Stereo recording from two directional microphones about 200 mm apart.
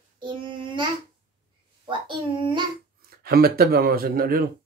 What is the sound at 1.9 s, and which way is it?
Speech, 25° right (ahead or behind).